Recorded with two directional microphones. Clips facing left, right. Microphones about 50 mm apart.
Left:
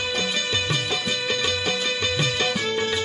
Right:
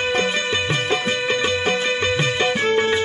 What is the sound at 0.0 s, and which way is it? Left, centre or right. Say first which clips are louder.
Music: right 5 dB; right.